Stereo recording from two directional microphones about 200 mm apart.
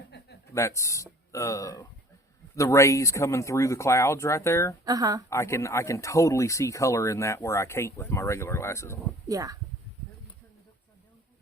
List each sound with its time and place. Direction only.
0.5 s speech: 15° left (ahead or behind)
4.9 s speech: 15° right (ahead or behind)
5.3 s speech: 15° left (ahead or behind)
9.3 s speech: 15° right (ahead or behind)